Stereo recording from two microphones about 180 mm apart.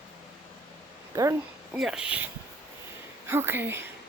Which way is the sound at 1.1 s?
15° right (ahead or behind).